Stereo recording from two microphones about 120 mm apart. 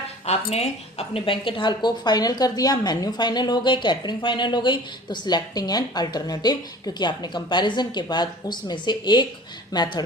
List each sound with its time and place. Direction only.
0.3 s a woman's voice: 60° left (ahead or behind); by 10.0 s 35° left (ahead or behind)